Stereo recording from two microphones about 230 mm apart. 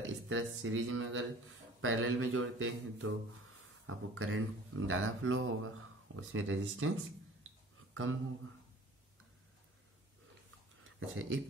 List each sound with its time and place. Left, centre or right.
0.3 s speech: right
7.9 s speech: right
10.8 s speech: right